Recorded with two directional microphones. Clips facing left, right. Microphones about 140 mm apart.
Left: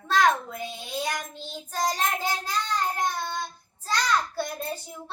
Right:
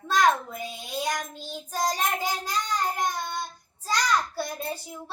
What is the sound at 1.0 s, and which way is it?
Child singing, 10° right (ahead or behind).